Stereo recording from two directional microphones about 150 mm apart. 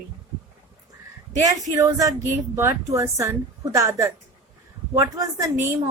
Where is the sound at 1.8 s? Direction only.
20° right (ahead or behind).